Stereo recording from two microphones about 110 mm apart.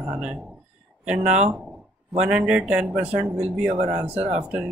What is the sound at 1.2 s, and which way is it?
Mantra, 90° right.